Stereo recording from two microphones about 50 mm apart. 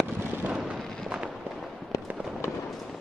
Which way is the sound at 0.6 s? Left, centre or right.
Centre.